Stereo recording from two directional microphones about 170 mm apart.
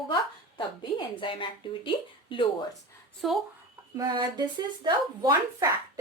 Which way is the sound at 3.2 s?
Centre (ahead or behind).